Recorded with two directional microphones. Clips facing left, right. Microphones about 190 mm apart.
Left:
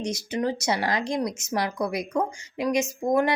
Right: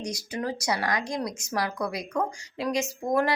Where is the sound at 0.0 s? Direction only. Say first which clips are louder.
Left 5 dB; 25° left (ahead or behind).